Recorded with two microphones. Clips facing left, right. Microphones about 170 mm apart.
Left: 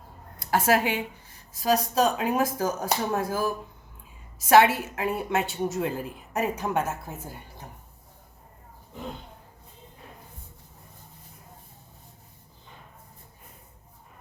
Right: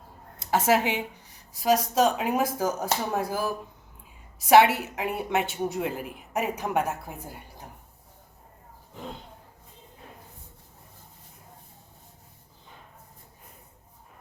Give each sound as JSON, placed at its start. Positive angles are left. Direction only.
{"t": 0.3, "sound": "a woman's voice", "side_deg": -20}
{"t": 4.4, "sound": "a woman's voice", "side_deg": -15}